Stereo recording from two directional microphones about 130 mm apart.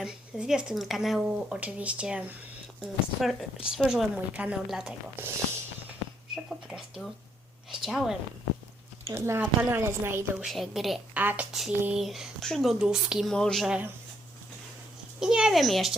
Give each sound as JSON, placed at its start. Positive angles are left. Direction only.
{"t": 0.0, "sound": "a woman's voice", "side_deg": -5}
{"t": 5.2, "sound": "a woman's voice", "side_deg": -15}
{"t": 6.3, "sound": "speech", "side_deg": 0}
{"t": 9.0, "sound": "a woman's voice", "side_deg": -20}
{"t": 10.4, "sound": "speech", "side_deg": 0}
{"t": 11.2, "sound": "a woman's voice", "side_deg": -15}
{"t": 15.2, "sound": "speech", "side_deg": -5}